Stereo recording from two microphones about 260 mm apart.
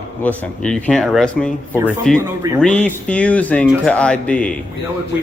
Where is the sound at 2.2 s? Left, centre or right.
Centre.